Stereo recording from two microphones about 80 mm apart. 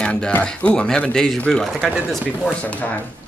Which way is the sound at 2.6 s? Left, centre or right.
Centre.